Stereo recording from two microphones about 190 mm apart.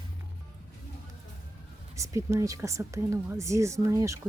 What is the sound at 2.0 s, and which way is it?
Speech, 15° right (ahead or behind).